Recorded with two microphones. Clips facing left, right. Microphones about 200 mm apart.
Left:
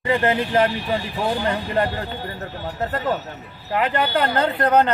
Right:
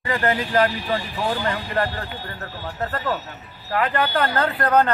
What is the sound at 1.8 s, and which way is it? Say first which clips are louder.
Speech: left 2 dB; 20° left (ahead or behind).